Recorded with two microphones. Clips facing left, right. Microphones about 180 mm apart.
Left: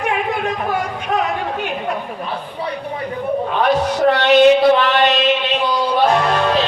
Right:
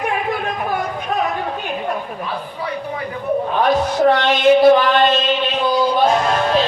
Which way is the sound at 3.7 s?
70° left (ahead or behind).